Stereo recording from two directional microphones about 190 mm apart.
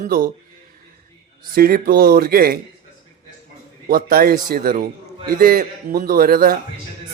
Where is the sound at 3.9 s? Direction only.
50° right (ahead or behind).